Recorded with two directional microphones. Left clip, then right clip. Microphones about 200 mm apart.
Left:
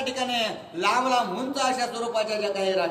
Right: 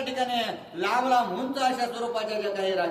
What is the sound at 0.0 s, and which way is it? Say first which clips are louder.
A man's voice: left 1 dB; 15° left (ahead or behind).